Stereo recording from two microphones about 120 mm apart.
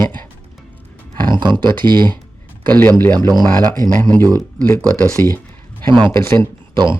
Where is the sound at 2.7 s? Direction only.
15° left (ahead or behind).